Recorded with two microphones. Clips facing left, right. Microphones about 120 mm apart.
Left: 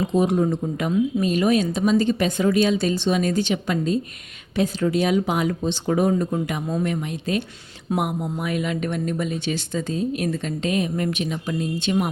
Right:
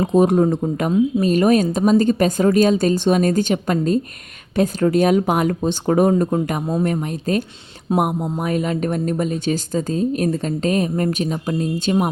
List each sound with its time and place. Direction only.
0.0 s speech: 45° right (ahead or behind)